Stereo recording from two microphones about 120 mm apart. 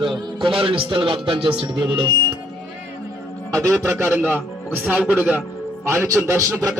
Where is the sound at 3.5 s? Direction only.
25° right (ahead or behind).